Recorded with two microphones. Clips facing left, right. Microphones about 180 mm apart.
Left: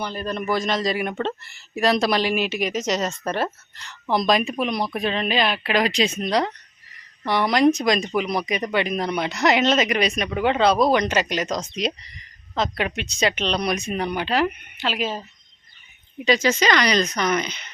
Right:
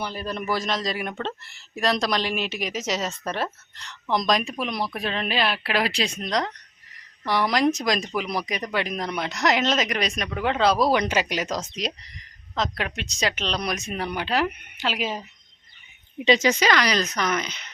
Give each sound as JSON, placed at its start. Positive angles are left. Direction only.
{"t": 0.0, "sound": "speech", "side_deg": -10}
{"t": 16.1, "sound": "speech", "side_deg": -20}
{"t": 16.6, "sound": "speech", "side_deg": -5}